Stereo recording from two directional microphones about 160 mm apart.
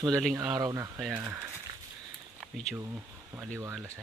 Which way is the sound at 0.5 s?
20° right (ahead or behind).